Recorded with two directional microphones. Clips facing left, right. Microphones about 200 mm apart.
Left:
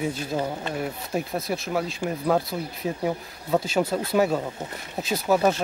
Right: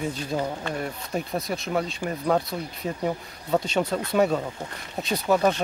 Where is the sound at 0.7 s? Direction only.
5° left (ahead or behind).